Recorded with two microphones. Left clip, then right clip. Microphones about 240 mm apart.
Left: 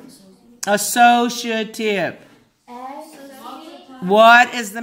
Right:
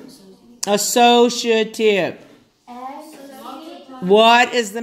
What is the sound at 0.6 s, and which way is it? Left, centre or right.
Speech, left.